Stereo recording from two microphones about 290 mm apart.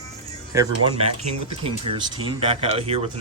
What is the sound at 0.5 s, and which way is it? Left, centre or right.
Speech, centre.